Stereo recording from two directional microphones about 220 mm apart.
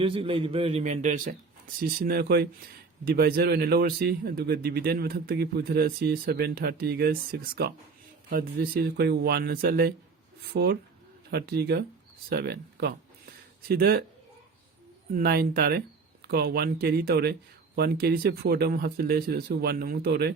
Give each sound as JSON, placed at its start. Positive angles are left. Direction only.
{"t": 0.0, "sound": "a man's voice", "side_deg": -25}
{"t": 15.1, "sound": "a man's voice", "side_deg": -45}